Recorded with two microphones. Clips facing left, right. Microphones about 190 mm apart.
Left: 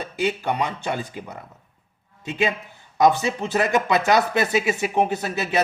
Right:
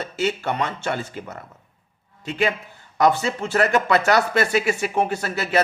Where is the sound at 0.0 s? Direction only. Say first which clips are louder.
Even; 15° left (ahead or behind).